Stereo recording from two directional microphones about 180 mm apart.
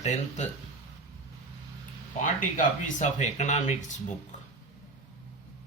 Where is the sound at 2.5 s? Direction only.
45° left (ahead or behind).